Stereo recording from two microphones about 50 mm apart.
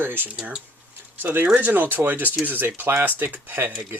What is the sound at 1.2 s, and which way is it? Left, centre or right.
Speech, right.